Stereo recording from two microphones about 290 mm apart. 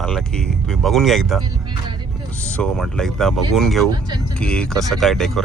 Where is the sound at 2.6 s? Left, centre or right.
Centre.